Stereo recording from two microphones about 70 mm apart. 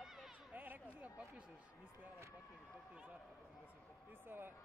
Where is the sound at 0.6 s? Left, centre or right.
Right.